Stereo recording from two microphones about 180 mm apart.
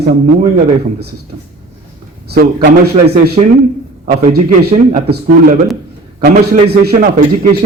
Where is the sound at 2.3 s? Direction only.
60° right (ahead or behind).